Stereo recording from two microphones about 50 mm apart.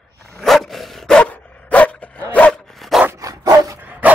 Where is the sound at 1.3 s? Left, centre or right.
Left.